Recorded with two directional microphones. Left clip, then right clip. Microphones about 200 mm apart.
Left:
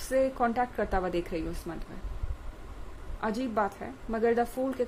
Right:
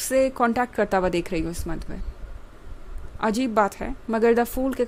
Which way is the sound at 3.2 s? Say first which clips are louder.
Right 8 dB; 50° right (ahead or behind).